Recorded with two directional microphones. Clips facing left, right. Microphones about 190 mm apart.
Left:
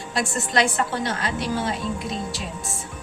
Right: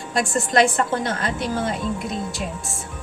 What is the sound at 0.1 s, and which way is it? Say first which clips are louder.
A woman's voice: right 4 dB; 50° right (ahead or behind).